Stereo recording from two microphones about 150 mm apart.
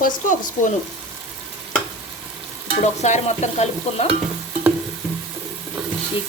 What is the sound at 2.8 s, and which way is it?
Speech, 50° left (ahead or behind).